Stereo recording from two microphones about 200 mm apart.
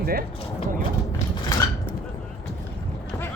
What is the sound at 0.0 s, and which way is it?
Speech, 50° right (ahead or behind).